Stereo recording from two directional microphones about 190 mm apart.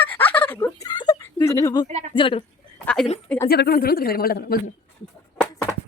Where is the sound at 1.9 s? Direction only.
35° right (ahead or behind).